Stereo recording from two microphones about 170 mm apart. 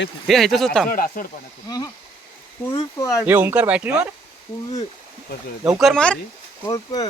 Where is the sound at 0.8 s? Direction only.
60° left (ahead or behind).